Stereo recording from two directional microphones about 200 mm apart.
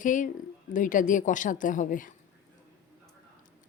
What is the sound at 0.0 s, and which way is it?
A woman's voice, 40° left (ahead or behind).